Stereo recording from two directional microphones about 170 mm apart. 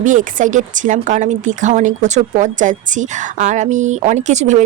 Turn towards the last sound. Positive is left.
turn(degrees=-45)  # may be behind; listen again after turning